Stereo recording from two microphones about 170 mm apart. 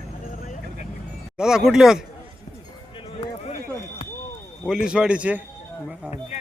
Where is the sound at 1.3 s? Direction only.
5° right (ahead or behind).